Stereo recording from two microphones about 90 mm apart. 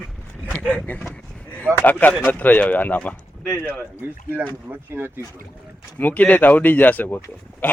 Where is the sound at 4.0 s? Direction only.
20° right (ahead or behind).